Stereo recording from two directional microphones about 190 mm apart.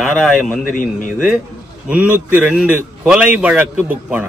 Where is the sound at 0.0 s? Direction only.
Centre (ahead or behind).